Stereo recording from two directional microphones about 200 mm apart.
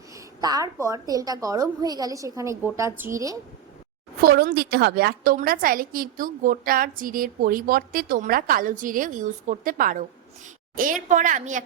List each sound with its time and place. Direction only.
0.1 s a woman's voice: 15° right (ahead or behind)
4.2 s a woman's voice: 50° right (ahead or behind)